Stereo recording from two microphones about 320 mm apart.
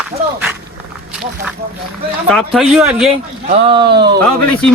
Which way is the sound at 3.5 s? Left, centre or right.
Centre.